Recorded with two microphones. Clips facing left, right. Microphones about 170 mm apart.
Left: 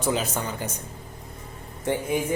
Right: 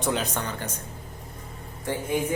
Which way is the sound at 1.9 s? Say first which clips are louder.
Left 4 dB; 20° left (ahead or behind).